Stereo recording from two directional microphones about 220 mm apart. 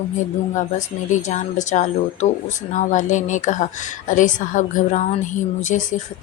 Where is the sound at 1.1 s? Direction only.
35° left (ahead or behind).